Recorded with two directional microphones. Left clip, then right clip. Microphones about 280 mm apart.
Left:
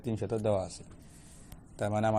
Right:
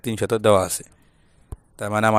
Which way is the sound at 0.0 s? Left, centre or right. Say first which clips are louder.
Right 11 dB; right.